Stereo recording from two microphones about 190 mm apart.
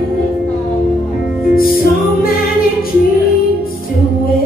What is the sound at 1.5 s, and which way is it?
Music, 50° left (ahead or behind).